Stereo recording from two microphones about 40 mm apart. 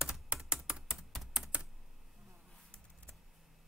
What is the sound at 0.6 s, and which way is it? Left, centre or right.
Typing, centre.